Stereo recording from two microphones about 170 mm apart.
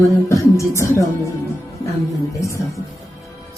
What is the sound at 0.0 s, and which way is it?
A woman's voice, 15° left (ahead or behind).